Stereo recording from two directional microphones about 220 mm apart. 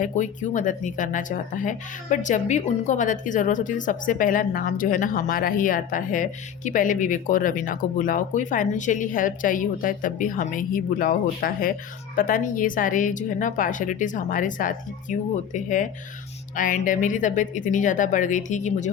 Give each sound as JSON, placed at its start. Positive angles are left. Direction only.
{"t": 0.0, "sound": "speech", "side_deg": 35}